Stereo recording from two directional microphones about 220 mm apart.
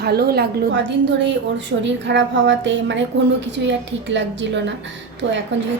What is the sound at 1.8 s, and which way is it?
A woman's voice, 55° right (ahead or behind).